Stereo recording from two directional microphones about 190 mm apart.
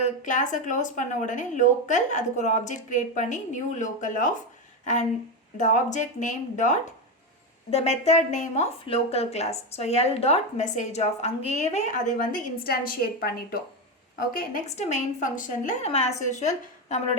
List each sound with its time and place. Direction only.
0.0 s a woman's voice: 40° left (ahead or behind)
5.5 s a woman's voice: 40° left (ahead or behind)
14.8 s a woman's voice: 35° left (ahead or behind)